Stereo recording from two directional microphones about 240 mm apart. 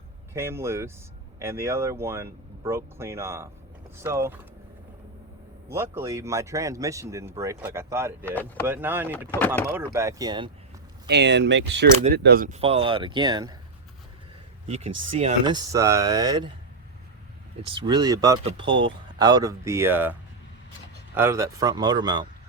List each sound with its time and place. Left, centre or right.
0.3 s speech: centre
5.7 s speech: centre
11.1 s speech: right; by 13.6 s centre
15.1 s speech: right
17.7 s speech: centre
21.2 s speech: centre